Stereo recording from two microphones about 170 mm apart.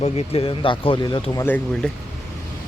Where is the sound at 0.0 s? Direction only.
30° left (ahead or behind).